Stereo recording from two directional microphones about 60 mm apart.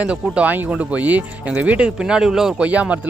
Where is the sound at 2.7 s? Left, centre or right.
Right.